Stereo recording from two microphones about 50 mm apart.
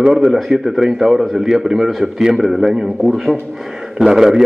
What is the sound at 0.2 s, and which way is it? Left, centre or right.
A man's voice, centre.